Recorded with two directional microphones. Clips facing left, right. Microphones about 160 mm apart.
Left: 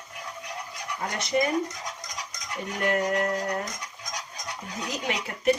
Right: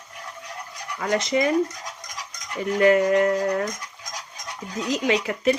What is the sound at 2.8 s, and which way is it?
Speech, 90° right.